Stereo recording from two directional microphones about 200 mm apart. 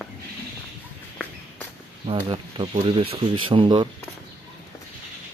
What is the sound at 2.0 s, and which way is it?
Speech, 25° right (ahead or behind).